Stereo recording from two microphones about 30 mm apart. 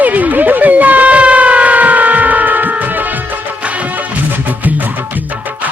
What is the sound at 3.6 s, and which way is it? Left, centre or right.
Music, right.